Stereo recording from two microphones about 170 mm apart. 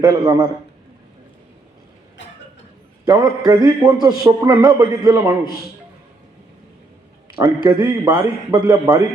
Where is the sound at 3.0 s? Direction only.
20° right (ahead or behind).